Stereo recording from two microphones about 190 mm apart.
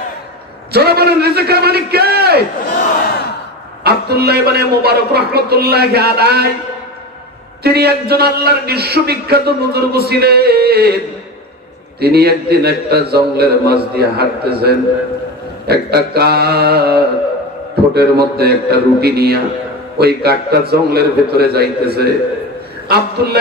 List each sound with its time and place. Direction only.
0.7 s a man's voice: 55° right (ahead or behind)
3.8 s a man's voice: 55° right (ahead or behind)
7.6 s a man's voice: 55° right (ahead or behind)
12.0 s a man's voice: 55° right (ahead or behind)